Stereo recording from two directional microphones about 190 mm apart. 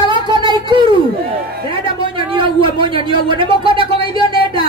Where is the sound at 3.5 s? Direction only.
25° right (ahead or behind).